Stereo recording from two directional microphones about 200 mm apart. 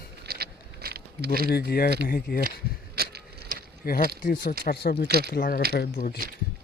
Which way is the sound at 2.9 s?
50° right (ahead or behind).